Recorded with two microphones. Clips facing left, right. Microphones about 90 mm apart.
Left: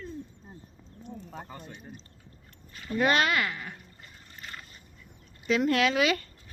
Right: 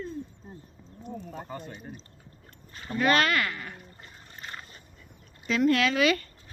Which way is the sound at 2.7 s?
35° right (ahead or behind).